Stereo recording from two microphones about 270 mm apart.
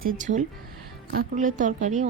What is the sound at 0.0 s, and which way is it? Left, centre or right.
A woman's voice, right.